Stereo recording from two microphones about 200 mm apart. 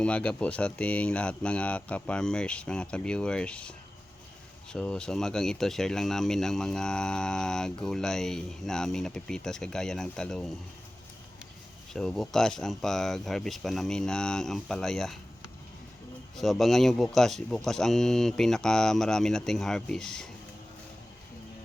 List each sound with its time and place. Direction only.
0.0 s speech: 5° left (ahead or behind)
11.9 s speech: centre (ahead or behind)
16.4 s speech: centre (ahead or behind)